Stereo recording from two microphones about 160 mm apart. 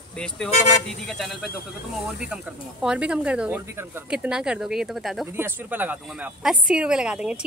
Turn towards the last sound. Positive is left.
turn(degrees=-5)  # may be behind; listen again after turning